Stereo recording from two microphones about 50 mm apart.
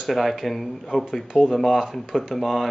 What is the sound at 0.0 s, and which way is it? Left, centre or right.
Speech, centre.